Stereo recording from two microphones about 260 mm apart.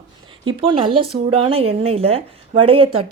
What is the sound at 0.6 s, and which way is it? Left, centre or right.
Speech, centre.